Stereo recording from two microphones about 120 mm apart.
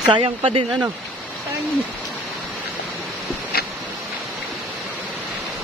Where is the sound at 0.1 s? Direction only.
45° right (ahead or behind).